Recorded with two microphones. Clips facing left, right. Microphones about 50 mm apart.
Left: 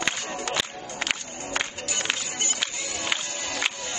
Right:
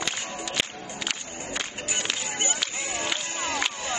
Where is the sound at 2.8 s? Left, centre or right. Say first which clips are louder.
Right 2 dB; right.